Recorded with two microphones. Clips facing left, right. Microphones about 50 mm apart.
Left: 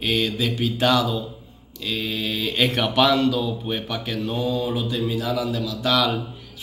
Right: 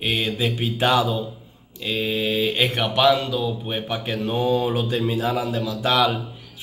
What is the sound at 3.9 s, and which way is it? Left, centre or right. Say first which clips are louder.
Speech: right 2 dB; right.